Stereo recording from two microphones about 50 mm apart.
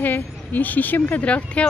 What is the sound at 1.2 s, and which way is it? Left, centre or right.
Speech, left.